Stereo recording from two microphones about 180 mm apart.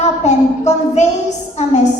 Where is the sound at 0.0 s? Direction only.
40° left (ahead or behind).